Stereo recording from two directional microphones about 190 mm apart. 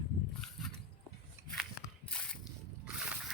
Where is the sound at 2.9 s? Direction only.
5° right (ahead or behind).